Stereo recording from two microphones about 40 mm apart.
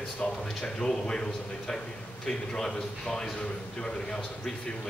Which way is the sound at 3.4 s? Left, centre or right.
Left.